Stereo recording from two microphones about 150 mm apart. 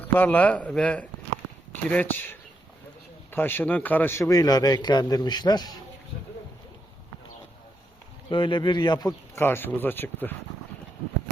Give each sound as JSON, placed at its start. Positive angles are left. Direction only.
{"t": 0.0, "sound": "a man's voice", "side_deg": 10}
{"t": 8.3, "sound": "speech", "side_deg": 35}
{"t": 9.4, "sound": "speech", "side_deg": 15}